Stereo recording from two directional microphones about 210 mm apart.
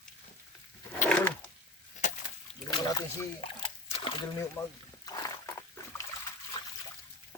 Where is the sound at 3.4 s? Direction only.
25° left (ahead or behind).